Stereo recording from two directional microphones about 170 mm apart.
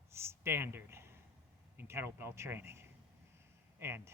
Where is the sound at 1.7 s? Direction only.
15° right (ahead or behind).